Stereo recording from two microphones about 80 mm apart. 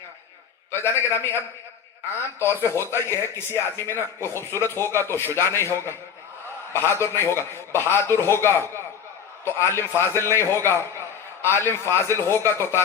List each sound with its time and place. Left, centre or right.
0.7 s speech: left